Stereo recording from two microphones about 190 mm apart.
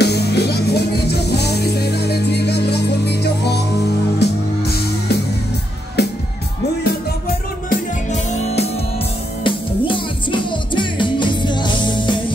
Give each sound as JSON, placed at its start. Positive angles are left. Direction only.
{"t": 0.0, "sound": "music", "side_deg": 60}
{"t": 7.7, "sound": "music", "side_deg": 40}